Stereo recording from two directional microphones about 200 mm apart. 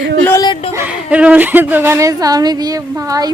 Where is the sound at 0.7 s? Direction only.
10° right (ahead or behind).